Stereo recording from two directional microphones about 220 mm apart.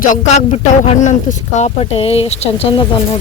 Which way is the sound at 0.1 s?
30° left (ahead or behind).